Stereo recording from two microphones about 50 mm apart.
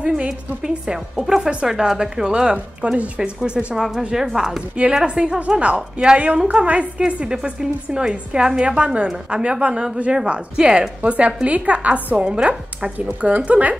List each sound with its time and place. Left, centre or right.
0.0 s a woman's voice: centre
11.0 s a woman's voice: right